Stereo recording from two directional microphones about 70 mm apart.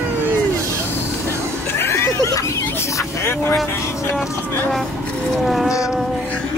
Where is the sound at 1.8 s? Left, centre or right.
Left.